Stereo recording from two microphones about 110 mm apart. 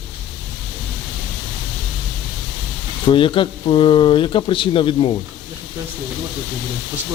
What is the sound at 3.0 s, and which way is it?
Speech, 50° left (ahead or behind).